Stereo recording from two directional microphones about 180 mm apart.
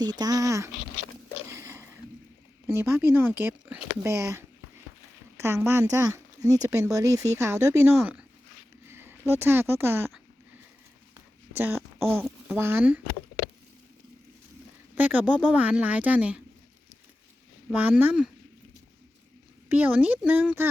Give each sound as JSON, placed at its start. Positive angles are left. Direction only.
{"t": 0.0, "sound": "speech", "side_deg": -20}
{"t": 1.5, "sound": "a sound", "side_deg": -15}
{"t": 2.6, "sound": "speech", "side_deg": -15}
{"t": 11.1, "sound": "a sound", "side_deg": -10}
{"t": 12.5, "sound": "speech", "side_deg": -10}
{"t": 14.9, "sound": "speech", "side_deg": -10}
{"t": 17.7, "sound": "speech", "side_deg": -10}
{"t": 19.6, "sound": "speech", "side_deg": -10}